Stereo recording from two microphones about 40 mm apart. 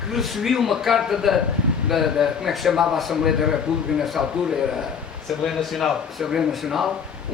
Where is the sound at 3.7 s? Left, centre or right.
Centre.